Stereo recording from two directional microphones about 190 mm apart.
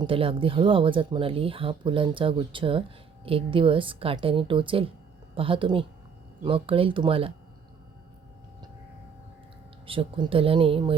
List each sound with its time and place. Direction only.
0.0 s speech: 30° right (ahead or behind)
9.8 s speech: 30° right (ahead or behind)